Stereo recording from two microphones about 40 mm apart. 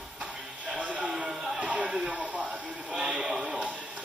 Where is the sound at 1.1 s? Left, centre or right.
Centre.